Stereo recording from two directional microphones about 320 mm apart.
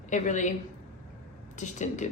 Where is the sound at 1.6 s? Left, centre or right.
Left.